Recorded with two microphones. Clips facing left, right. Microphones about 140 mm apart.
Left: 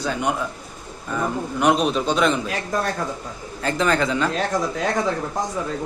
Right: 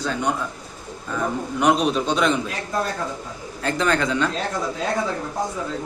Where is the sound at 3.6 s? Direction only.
Centre (ahead or behind).